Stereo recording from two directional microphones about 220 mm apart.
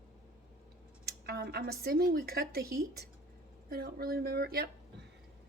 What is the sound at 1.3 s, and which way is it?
A woman's voice, 45° right (ahead or behind).